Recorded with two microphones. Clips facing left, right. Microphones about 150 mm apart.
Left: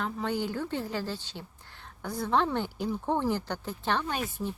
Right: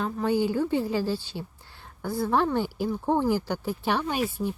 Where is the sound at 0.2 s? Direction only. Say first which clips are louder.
Right 10 dB; 10° right (ahead or behind).